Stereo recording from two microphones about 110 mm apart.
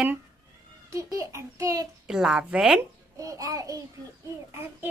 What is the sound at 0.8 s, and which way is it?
A woman's voice, 30° right (ahead or behind).